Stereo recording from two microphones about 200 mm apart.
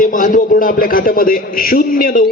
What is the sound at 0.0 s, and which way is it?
A man's voice, 40° left (ahead or behind).